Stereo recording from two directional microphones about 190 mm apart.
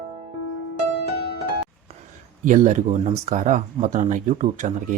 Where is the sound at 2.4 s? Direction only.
40° right (ahead or behind).